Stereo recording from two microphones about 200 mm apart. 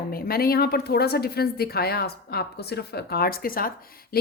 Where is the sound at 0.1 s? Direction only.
50° left (ahead or behind).